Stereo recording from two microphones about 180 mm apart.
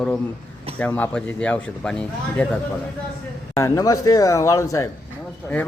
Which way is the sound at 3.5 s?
15° left (ahead or behind).